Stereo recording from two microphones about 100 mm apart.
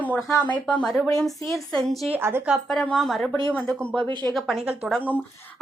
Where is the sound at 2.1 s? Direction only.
25° right (ahead or behind).